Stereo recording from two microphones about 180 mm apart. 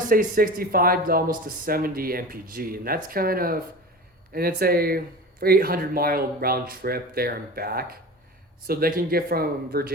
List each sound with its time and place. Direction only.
0.1 s speech: 50° right (ahead or behind)